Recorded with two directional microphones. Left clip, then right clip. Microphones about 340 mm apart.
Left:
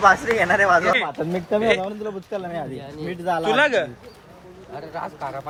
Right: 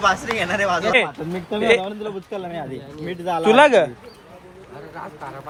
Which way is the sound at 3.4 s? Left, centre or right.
Centre.